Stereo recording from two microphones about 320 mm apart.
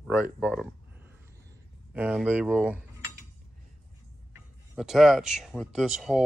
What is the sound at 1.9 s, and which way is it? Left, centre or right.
Cutlery, centre.